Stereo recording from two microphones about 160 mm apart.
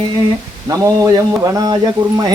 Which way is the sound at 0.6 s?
20° right (ahead or behind).